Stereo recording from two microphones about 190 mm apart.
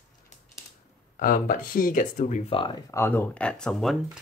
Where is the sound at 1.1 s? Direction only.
45° left (ahead or behind); by 2.8 s 25° left (ahead or behind).